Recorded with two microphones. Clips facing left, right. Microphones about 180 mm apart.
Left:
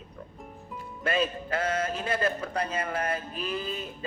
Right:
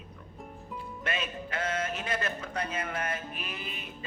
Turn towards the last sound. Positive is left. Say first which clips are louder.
# left 7 dB
turn(degrees=35)  # may be behind; listen again after turning